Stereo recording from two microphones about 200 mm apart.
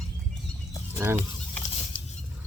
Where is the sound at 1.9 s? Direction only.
45° left (ahead or behind).